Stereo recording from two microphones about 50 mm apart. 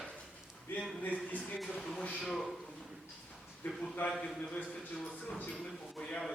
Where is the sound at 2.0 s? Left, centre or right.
Left.